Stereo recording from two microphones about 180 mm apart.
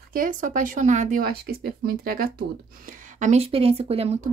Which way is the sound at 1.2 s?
60° right (ahead or behind).